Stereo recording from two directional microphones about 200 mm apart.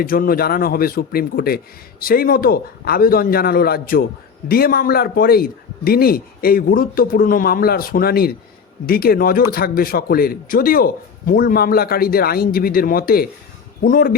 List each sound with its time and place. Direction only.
0.0 s speech: 45° left (ahead or behind)